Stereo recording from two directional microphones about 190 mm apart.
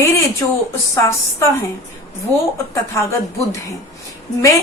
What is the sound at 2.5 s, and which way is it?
A woman's voice, 15° left (ahead or behind).